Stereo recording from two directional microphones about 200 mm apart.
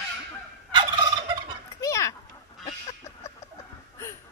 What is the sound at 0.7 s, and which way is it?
Fowl, 25° right (ahead or behind).